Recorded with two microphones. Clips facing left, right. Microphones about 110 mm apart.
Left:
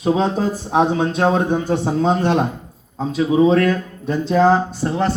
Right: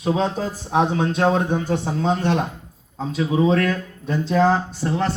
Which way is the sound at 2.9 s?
10° left (ahead or behind).